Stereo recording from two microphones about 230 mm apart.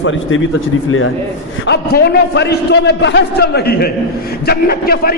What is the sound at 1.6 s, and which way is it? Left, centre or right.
A man's voice, left.